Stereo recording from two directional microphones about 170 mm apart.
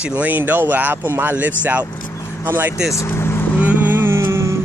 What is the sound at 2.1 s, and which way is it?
Vehicle, 15° left (ahead or behind).